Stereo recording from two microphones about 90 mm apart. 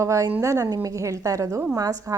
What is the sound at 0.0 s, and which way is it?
A woman's voice, 35° right (ahead or behind).